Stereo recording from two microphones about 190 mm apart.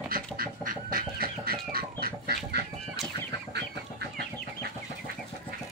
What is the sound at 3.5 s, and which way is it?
Chicken, 60° right (ahead or behind).